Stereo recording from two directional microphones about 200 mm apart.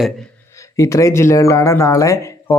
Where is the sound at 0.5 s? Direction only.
15° left (ahead or behind).